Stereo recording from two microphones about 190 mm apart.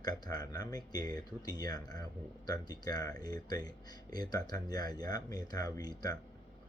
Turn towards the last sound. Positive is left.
turn(degrees=20)  # may be behind; listen again after turning